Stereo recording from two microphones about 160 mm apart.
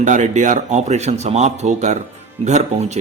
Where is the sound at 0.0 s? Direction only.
50° right (ahead or behind).